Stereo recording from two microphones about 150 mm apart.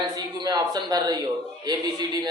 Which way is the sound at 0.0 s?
30° right (ahead or behind).